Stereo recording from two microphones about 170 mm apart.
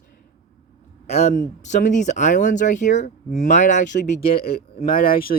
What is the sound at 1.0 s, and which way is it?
Speech, 40° left (ahead or behind).